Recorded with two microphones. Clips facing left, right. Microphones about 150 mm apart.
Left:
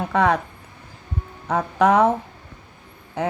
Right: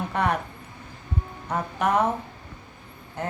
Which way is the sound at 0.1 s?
90° left.